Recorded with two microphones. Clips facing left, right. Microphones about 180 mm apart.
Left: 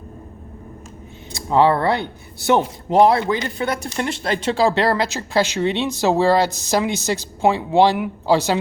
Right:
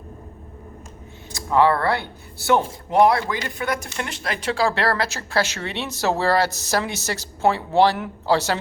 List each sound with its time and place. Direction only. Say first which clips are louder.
1.5 s speech: left 2 dB; 25° left (ahead or behind)